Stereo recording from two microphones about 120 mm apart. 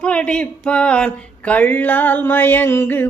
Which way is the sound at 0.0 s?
10° left (ahead or behind).